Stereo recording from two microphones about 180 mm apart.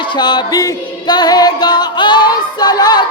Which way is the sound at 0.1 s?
25° left (ahead or behind).